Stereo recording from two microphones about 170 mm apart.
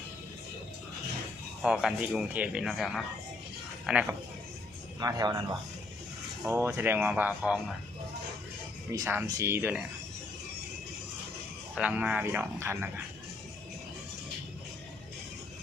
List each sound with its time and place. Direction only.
1.6 s speech: 5° right (ahead or behind)
4.9 s speech: 20° right (ahead or behind)
8.9 s speech: 15° right (ahead or behind)
11.7 s speech: 5° right (ahead or behind)